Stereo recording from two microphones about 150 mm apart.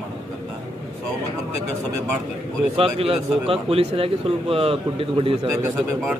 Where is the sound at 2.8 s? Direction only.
40° right (ahead or behind).